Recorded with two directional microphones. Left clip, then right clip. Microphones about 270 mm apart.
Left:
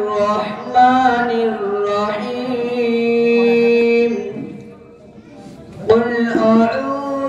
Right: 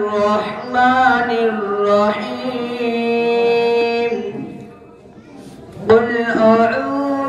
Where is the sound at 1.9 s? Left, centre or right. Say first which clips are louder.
Right 4 dB; right.